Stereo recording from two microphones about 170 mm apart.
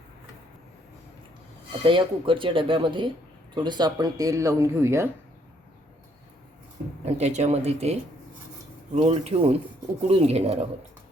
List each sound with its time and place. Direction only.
1.8 s speech: 30° right (ahead or behind)
7.0 s speech: 40° right (ahead or behind)
9.0 s speech: 35° right (ahead or behind)